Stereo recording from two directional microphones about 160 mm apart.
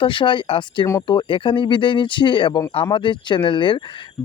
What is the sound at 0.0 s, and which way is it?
Speech, 30° left (ahead or behind).